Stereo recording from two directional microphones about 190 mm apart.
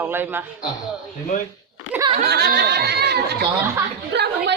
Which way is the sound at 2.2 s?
60° right (ahead or behind).